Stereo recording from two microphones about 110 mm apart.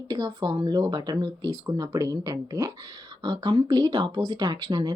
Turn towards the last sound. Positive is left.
turn(degrees=-35)  # may be behind; listen again after turning